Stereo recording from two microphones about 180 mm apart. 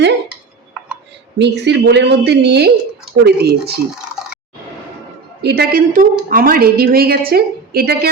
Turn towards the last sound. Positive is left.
turn(degrees=-60)  # may be behind; listen again after turning